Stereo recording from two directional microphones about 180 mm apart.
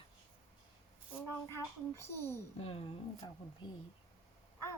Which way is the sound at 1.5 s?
15° left (ahead or behind).